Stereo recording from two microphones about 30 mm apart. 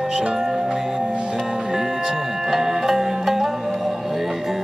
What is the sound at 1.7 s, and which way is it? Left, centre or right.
Music, centre.